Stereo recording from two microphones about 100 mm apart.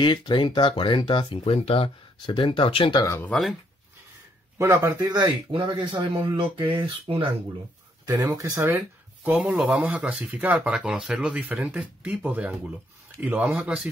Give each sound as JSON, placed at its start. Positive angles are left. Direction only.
{"t": 0.0, "sound": "speech", "side_deg": 50}
{"t": 2.2, "sound": "speech", "side_deg": 55}
{"t": 3.3, "sound": "speech", "side_deg": 5}
{"t": 4.6, "sound": "a man's voice", "side_deg": -25}
{"t": 5.0, "sound": "speech", "side_deg": -45}
{"t": 8.0, "sound": "speech", "side_deg": -45}
{"t": 8.6, "sound": "a sound", "side_deg": -20}
{"t": 9.6, "sound": "speech", "side_deg": -10}